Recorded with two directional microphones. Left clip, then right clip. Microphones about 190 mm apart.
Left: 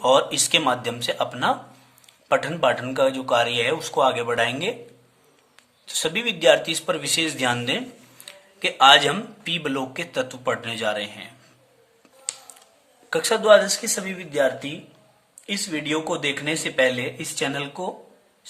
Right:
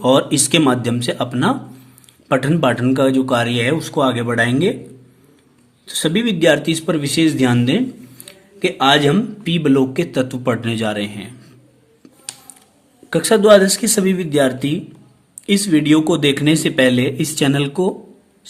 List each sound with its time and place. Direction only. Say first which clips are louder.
0.0 s speech: right 4 dB; 15° right (ahead or behind)
5.8 s speech: right 5 dB; 10° right (ahead or behind)
13.1 s speech: right 5 dB; 15° right (ahead or behind)